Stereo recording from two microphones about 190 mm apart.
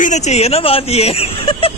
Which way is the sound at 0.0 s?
40° left (ahead or behind).